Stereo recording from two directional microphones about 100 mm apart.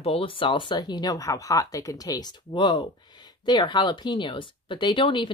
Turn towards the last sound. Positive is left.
turn(degrees=55)  # may be behind; listen again after turning